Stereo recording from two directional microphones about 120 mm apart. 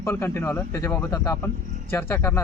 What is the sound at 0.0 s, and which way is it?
Speech, 20° left (ahead or behind).